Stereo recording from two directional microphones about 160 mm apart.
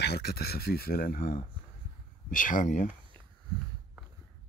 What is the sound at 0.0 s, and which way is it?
Speech, 85° left.